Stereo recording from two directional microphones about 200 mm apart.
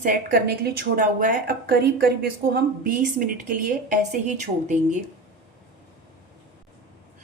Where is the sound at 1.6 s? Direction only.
55° right (ahead or behind).